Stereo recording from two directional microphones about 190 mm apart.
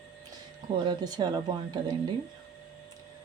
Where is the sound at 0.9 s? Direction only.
20° right (ahead or behind).